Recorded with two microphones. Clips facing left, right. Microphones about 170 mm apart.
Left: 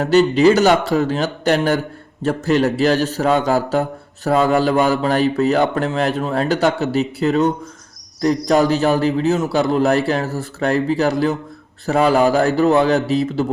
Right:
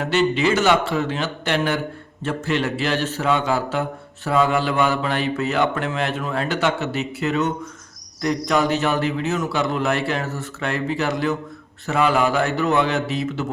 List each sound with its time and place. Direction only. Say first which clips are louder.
0.0 s a man's voice: left 7 dB; 40° left (ahead or behind)